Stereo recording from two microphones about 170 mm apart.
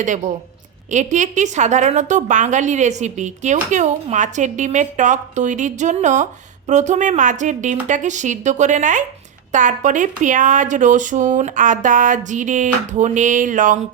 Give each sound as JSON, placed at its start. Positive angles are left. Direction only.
{"t": 0.9, "sound": "a woman's voice", "side_deg": -45}